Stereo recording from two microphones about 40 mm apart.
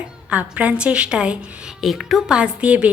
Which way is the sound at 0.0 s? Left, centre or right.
Right.